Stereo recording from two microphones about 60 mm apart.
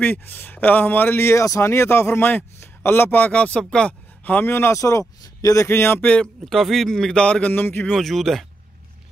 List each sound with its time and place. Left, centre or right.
0.0 s speech: left
4.5 s speech: left
4.7 s speech: left
5.7 s speech: left
5.9 s speech: left
6.4 s speech: centre
7.5 s speech: left
7.9 s speech: centre